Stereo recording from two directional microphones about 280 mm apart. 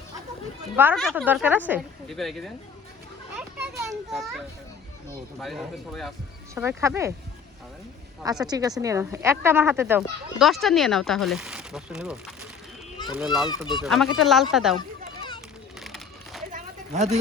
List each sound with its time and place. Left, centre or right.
0.8 s speech: centre
3.3 s children playing: centre
5.4 s speech: centre
8.4 s speech: centre
13.1 s speech: centre
15.8 s a sound: centre
16.5 s a sound: right